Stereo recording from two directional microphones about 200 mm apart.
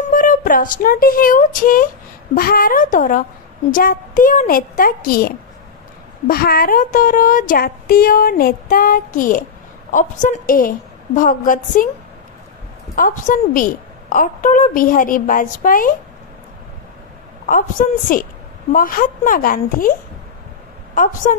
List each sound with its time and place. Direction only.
0.0 s a woman's voice: 40° left (ahead or behind)
12.9 s a woman's voice: 40° left (ahead or behind)
17.5 s a woman's voice: 45° left (ahead or behind)
20.9 s a woman's voice: 40° left (ahead or behind)